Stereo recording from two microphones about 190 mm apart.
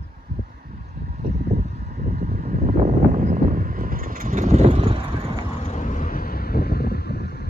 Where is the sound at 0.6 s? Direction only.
40° right (ahead or behind).